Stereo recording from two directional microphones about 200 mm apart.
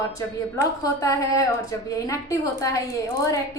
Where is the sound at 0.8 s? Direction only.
15° left (ahead or behind).